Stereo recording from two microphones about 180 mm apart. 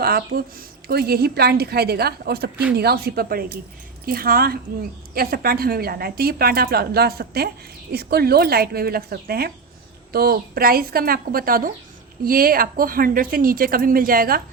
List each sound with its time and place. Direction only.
0.0 s a woman's voice: 55° right (ahead or behind)